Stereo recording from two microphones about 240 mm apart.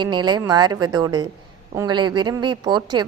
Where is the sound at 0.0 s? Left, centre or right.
Centre.